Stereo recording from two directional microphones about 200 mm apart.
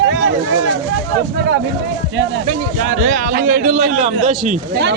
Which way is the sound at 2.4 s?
40° right (ahead or behind).